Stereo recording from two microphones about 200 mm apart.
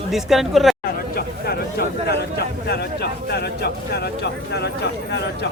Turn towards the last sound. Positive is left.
turn(degrees=60)  # may be behind; listen again after turning